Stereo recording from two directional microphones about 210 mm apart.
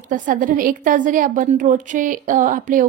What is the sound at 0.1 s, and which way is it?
A woman's voice, 40° right (ahead or behind).